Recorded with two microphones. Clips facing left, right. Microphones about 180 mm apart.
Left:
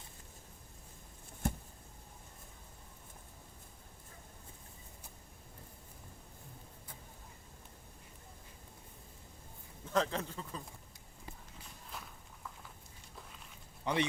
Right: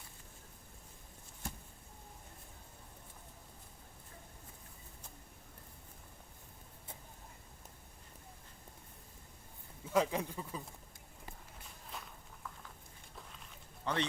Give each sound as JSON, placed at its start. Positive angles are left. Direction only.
{"t": 1.4, "sound": "a sound", "side_deg": 55}
{"t": 9.8, "sound": "speech", "side_deg": -10}
{"t": 11.9, "sound": "walk", "side_deg": 5}
{"t": 13.8, "sound": "a man's voice", "side_deg": 10}